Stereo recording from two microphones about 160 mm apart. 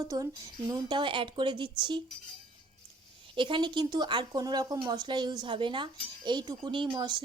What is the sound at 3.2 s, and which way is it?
Speech, 30° right (ahead or behind).